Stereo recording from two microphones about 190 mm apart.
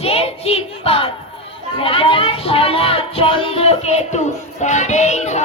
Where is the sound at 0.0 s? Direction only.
30° left (ahead or behind).